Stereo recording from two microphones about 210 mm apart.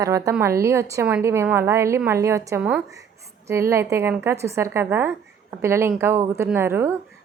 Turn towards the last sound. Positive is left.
turn(degrees=-10)  # may be behind; listen again after turning